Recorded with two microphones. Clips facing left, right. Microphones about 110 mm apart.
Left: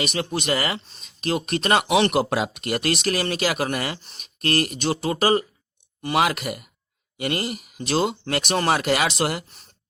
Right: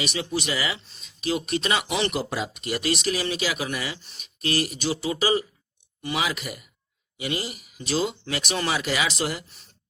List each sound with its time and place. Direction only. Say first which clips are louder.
0.0 s speech: left 2 dB; 50° left (ahead or behind)